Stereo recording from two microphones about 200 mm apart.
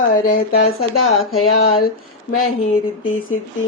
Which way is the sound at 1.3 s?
90° left.